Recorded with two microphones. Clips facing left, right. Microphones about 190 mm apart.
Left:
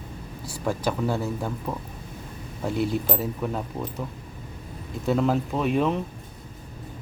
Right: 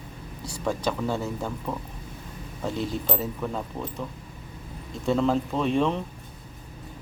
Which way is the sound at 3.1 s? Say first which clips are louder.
Left 1 dB; 10° left (ahead or behind).